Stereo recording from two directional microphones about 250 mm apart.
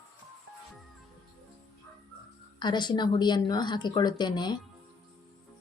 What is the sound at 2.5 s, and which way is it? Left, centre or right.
A woman's voice, centre.